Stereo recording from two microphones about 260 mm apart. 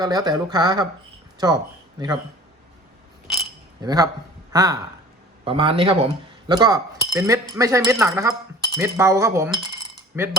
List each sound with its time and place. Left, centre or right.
0.0 s speech: centre
3.8 s a man's voice: centre